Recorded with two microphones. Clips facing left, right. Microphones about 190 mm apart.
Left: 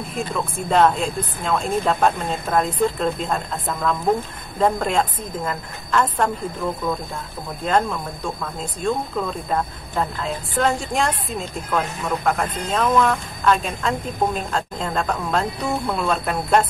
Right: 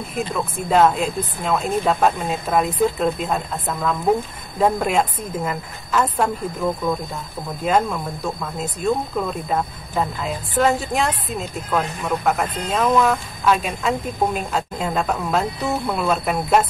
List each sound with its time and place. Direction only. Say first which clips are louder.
0.1 s speech: right 2 dB; 5° right (ahead or behind)